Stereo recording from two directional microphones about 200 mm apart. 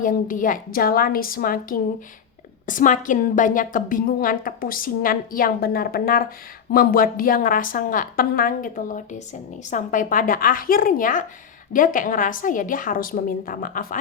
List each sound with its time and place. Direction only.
0.0 s a woman's voice: 40° left (ahead or behind)